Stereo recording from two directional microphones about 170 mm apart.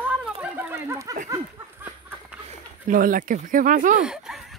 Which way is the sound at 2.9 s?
55° right (ahead or behind).